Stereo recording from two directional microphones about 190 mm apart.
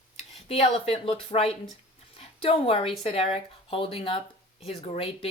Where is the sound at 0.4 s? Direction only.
30° left (ahead or behind).